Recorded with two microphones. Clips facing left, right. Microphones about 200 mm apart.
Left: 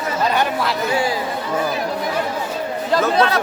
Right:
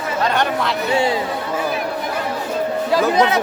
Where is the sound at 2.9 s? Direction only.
15° right (ahead or behind).